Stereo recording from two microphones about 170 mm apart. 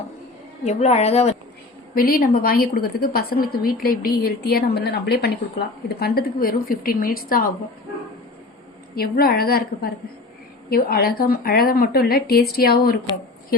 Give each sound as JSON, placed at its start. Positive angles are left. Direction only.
{"t": 0.6, "sound": "a woman's voice", "side_deg": 40}
{"t": 2.0, "sound": "a woman's voice", "side_deg": 60}
{"t": 9.0, "sound": "a woman's voice", "side_deg": 65}